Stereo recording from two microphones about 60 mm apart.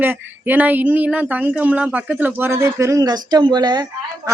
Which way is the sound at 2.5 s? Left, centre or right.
Right.